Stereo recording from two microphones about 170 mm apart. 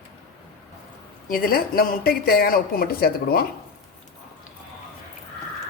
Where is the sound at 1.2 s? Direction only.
60° left (ahead or behind).